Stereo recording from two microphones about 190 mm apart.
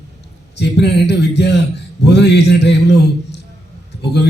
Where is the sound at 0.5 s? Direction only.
60° left (ahead or behind).